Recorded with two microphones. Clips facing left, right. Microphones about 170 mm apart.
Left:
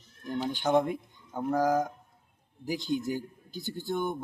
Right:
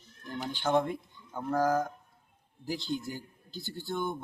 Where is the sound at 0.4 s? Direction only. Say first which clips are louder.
Left 2 dB; 15° left (ahead or behind).